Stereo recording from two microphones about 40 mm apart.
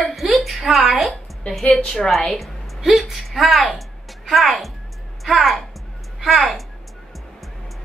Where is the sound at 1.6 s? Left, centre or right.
Centre.